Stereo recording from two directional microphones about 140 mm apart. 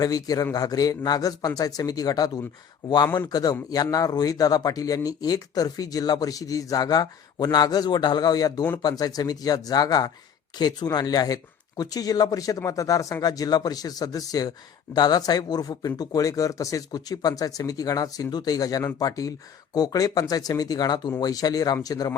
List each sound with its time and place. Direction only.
0.0 s speech: 25° left (ahead or behind)